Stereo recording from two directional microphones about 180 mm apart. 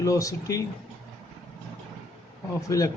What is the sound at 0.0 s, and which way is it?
Speech, 20° left (ahead or behind).